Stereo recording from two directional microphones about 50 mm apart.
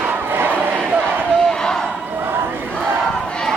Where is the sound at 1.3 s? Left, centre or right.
Centre.